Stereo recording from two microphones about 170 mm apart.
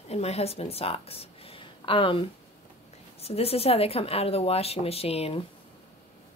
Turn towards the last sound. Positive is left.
turn(degrees=35)  # may be behind; listen again after turning